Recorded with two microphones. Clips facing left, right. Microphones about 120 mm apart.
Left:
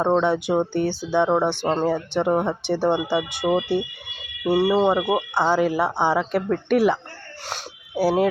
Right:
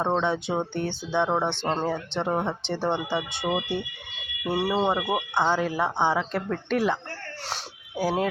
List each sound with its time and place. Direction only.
0.0 s speech: 10° left (ahead or behind)
4.9 s speech: 20° left (ahead or behind)
5.3 s speech: 10° left (ahead or behind)